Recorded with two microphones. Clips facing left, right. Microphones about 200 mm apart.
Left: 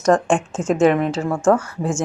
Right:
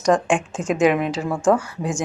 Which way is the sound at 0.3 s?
15° right (ahead or behind).